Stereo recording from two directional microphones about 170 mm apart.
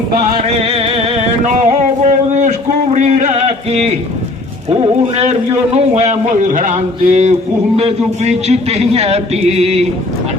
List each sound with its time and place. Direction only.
0.4 s music: 35° right (ahead or behind)
2.0 s a sound: 45° right (ahead or behind)
4.7 s a man's voice: 35° right (ahead or behind)